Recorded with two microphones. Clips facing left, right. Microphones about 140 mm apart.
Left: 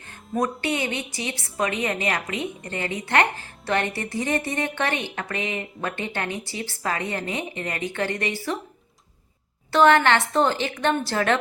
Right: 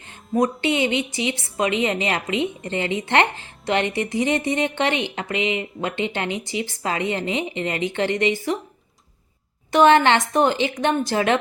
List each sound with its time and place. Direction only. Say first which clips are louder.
0.3 s a woman's voice: right 5 dB; 20° right (ahead or behind)
9.7 s a woman's voice: right 2 dB; 20° right (ahead or behind)